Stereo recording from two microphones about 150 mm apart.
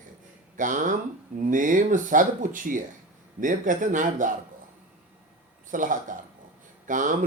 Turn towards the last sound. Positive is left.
turn(degrees=-60)  # may be behind; listen again after turning